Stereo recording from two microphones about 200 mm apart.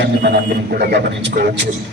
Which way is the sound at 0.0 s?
55° right (ahead or behind).